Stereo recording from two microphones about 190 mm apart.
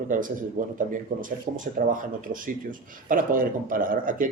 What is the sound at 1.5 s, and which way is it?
Speech, 45° right (ahead or behind).